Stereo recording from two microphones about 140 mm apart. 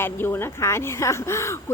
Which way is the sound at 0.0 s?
15° left (ahead or behind).